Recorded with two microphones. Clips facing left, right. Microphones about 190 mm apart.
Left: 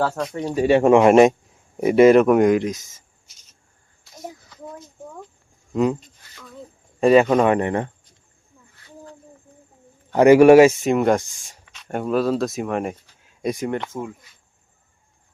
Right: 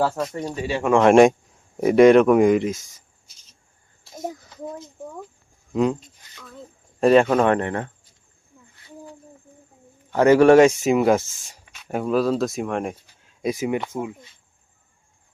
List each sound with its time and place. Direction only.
0.0 s speech: centre (ahead or behind)
0.5 s speech: 45° left (ahead or behind)
0.9 s speech: 5° left (ahead or behind)
5.7 s a sound: centre (ahead or behind)
7.0 s speech: 5° left (ahead or behind)
10.1 s speech: 15° left (ahead or behind); by 14.2 s 10° right (ahead or behind)